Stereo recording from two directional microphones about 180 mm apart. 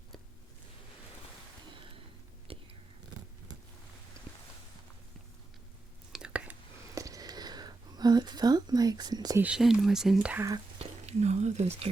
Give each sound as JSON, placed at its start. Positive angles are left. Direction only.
{"t": 1.7, "sound": "a sound", "side_deg": -30}
{"t": 2.5, "sound": "whispering", "side_deg": -30}
{"t": 6.1, "sound": "whispering", "side_deg": -5}
{"t": 9.4, "sound": "speech", "side_deg": -5}
{"t": 10.8, "sound": "speech", "side_deg": -35}